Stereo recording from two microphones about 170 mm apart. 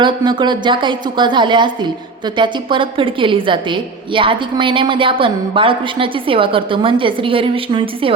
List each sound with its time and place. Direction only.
0.0 s a woman's voice: 25° right (ahead or behind)